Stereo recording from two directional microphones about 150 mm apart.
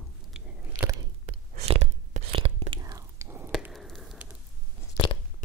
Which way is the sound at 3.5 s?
Centre (ahead or behind).